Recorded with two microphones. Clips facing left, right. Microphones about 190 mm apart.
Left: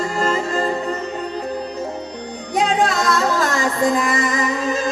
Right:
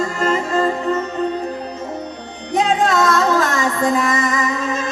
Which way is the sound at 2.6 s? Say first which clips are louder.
Right 2 dB; 35° left (ahead or behind).